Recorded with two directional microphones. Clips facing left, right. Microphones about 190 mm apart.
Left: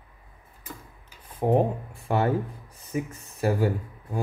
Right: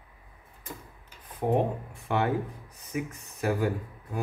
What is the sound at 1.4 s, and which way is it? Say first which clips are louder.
Speech: left 4 dB; 30° left (ahead or behind).